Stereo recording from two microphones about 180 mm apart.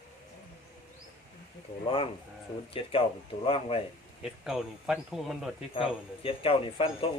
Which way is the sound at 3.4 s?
30° left (ahead or behind).